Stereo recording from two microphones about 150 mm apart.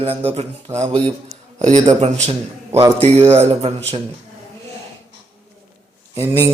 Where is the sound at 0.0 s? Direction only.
40° right (ahead or behind).